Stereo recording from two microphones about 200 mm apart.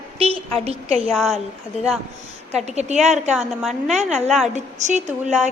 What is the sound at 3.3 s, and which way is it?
Speech, 5° right (ahead or behind).